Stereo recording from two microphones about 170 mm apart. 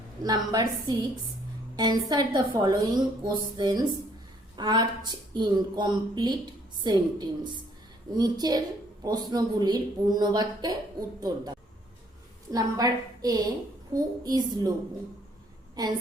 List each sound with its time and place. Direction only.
0.2 s a woman's voice: 25° right (ahead or behind)
15.7 s a woman's voice: 25° right (ahead or behind)